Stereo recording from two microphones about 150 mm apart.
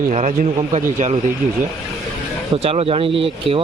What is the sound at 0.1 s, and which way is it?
A man's voice, 50° right (ahead or behind).